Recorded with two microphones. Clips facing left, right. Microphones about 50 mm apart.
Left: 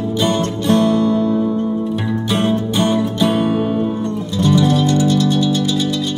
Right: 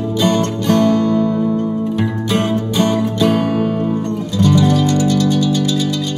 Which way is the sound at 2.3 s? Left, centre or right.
Right.